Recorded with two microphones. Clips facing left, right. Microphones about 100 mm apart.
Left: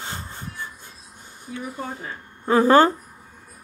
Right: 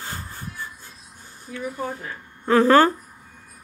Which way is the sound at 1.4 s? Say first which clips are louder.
Right 2 dB; 15° left (ahead or behind).